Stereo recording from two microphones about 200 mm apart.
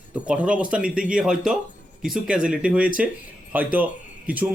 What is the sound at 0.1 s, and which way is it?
Speech, 5° right (ahead or behind).